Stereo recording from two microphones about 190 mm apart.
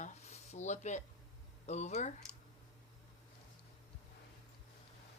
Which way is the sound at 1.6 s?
35° left (ahead or behind).